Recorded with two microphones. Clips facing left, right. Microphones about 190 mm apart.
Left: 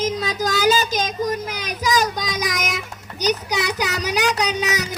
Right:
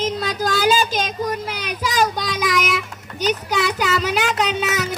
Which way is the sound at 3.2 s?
40° left (ahead or behind).